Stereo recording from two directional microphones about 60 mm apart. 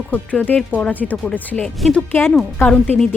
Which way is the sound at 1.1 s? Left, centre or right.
Centre.